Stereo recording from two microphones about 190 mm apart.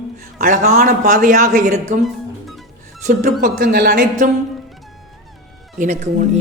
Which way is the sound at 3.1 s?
40° right (ahead or behind).